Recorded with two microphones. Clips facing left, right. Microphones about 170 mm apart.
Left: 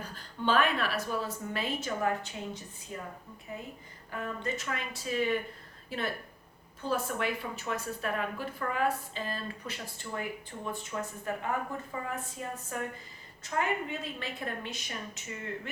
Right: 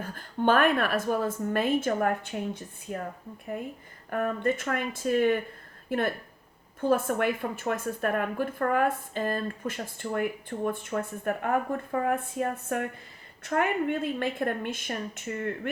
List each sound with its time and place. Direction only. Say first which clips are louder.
0.0 s a woman's voice: right 7 dB; 50° right (ahead or behind)